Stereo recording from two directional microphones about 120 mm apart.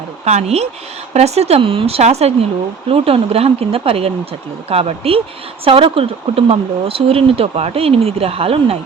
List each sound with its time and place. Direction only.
0.3 s speech: 65° right (ahead or behind)